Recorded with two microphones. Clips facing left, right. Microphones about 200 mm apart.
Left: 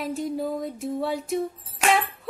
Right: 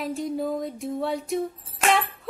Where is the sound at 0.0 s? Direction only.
Centre (ahead or behind).